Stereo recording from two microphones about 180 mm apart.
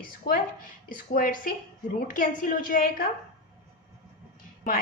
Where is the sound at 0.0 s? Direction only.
50° left (ahead or behind).